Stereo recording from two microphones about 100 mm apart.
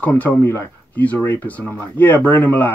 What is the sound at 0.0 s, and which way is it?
Speech, 15° left (ahead or behind).